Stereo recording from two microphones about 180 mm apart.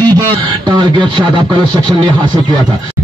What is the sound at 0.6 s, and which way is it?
Beatboxing, 25° right (ahead or behind).